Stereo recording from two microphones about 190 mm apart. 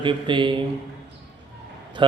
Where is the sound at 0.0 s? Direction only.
25° right (ahead or behind).